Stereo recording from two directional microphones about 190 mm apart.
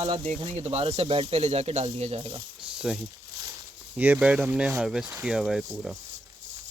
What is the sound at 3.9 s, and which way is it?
Speech, 10° right (ahead or behind).